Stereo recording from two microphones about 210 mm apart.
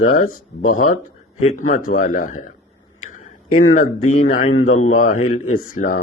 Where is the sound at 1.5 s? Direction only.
35° left (ahead or behind).